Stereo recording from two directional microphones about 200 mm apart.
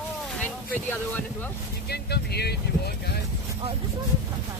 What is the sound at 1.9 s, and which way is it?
Speech, 55° left (ahead or behind).